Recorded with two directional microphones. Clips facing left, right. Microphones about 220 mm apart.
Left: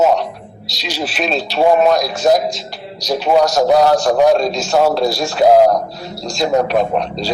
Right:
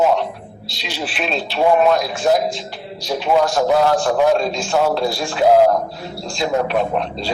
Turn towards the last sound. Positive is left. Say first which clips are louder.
# left 3 dB
turn(degrees=40)  # may be behind; listen again after turning